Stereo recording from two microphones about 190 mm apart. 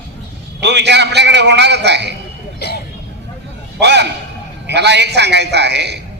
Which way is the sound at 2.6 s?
60° left (ahead or behind).